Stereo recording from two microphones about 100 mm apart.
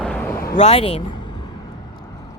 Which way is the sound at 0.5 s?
85° left.